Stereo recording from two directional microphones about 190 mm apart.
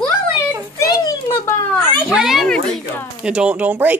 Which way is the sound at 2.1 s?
Centre (ahead or behind).